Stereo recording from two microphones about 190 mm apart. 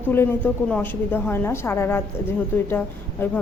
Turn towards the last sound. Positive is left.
turn(degrees=10)  # may be behind; listen again after turning